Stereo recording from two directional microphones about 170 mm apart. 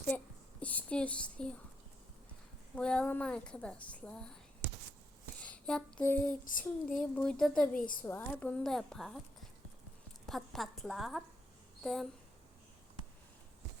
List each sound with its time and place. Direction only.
0.6 s speech: 10° left (ahead or behind)
2.7 s a woman's voice: 5° left (ahead or behind)
5.4 s a sound: 5° left (ahead or behind)
6.4 s a sound: 50° left (ahead or behind)
6.8 s a woman's voice: 5° left (ahead or behind)
10.2 s a woman's voice: centre (ahead or behind)